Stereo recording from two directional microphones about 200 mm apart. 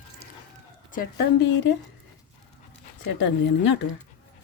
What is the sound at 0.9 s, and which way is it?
Speech, 50° left (ahead or behind).